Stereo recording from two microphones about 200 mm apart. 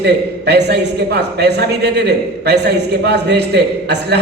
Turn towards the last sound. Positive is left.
turn(degrees=-55)  # may be behind; listen again after turning